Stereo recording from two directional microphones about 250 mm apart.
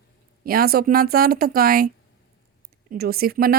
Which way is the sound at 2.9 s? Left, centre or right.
Right.